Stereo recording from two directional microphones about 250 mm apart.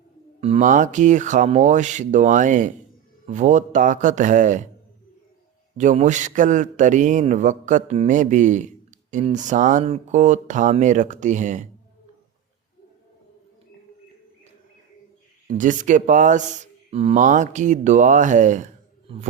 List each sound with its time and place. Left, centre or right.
0.3 s a man's voice: right
5.7 s a man's voice: right
15.4 s a man's voice: right